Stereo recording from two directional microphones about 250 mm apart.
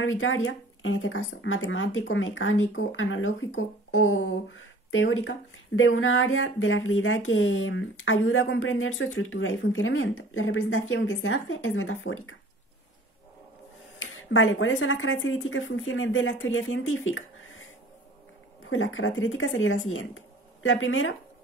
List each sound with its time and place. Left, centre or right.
0.0 s speech: left
13.9 s speech: left